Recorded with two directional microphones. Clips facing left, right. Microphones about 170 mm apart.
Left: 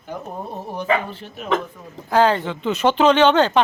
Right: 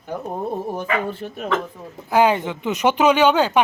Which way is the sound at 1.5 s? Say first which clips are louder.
Left 2 dB; 20° left (ahead or behind).